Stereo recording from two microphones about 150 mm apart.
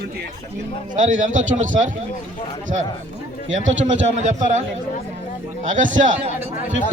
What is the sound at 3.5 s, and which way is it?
A man's voice, 50° right (ahead or behind).